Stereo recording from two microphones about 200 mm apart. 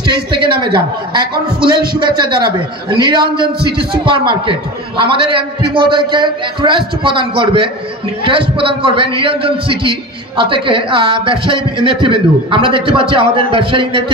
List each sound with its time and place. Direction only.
0.0 s a man's voice: 25° right (ahead or behind)